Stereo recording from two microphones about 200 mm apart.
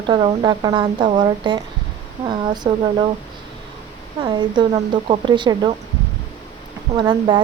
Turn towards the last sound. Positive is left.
turn(degrees=-25)  # may be behind; listen again after turning